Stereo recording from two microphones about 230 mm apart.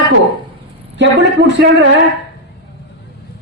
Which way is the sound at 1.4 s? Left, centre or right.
Right.